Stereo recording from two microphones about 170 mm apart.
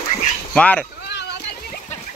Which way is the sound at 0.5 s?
10° left (ahead or behind).